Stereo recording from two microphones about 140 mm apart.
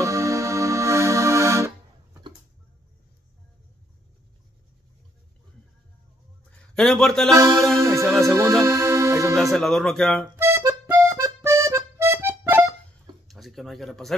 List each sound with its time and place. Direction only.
0.0 s music: 20° right (ahead or behind)
6.7 s speech: 5° left (ahead or behind)
7.3 s music: 20° right (ahead or behind)
8.0 s speech: centre (ahead or behind)
8.6 s music: 20° right (ahead or behind)
9.3 s speech: centre (ahead or behind)
10.3 s accordion: 20° right (ahead or behind)
13.3 s speech: centre (ahead or behind)